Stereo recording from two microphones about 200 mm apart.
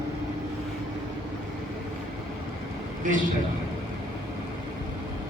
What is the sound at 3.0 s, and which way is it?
Speech, 40° right (ahead or behind).